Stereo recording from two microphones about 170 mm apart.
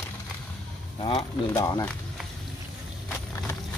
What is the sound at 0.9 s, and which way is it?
Speech, 30° left (ahead or behind).